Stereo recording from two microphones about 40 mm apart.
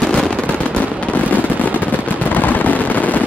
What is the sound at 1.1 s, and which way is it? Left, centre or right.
Fireworks, left.